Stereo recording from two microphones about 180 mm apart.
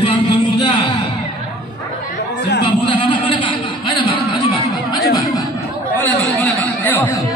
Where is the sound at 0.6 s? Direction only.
25° left (ahead or behind).